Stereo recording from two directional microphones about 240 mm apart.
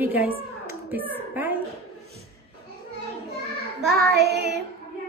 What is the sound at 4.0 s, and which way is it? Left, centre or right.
Child singing, right.